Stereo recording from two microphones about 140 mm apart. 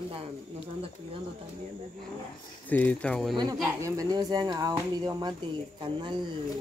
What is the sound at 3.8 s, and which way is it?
Speech, 25° right (ahead or behind).